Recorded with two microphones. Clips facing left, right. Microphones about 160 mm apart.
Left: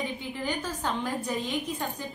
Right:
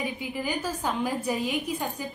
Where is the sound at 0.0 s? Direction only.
10° right (ahead or behind).